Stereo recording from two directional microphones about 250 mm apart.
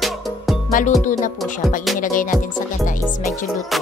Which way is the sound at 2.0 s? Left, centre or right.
Left.